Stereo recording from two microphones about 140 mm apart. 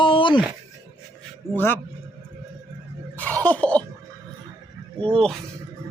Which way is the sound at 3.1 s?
10° left (ahead or behind).